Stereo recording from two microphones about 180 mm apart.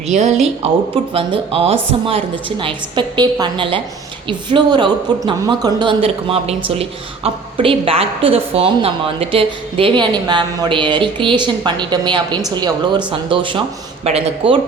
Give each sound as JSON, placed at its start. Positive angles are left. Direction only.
{"t": 0.1, "sound": "a woman's voice", "side_deg": -40}